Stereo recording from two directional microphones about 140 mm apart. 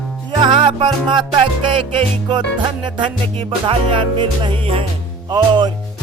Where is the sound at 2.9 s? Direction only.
35° right (ahead or behind).